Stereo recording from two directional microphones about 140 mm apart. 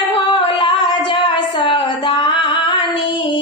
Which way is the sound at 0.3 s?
35° left (ahead or behind).